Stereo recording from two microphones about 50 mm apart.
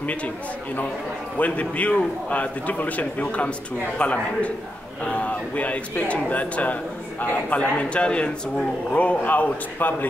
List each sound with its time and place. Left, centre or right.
0.0 s a man's voice: left
1.4 s a man's voice: left